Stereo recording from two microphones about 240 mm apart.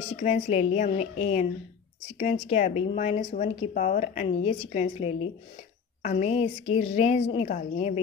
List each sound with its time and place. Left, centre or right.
0.1 s speech: left